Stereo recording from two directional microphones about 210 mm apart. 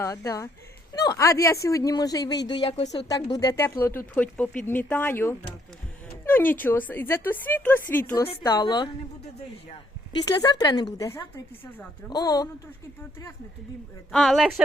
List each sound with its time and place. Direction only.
0.0 s speech: 15° left (ahead or behind)
10.2 s speech: 20° left (ahead or behind)
14.1 s speech: centre (ahead or behind)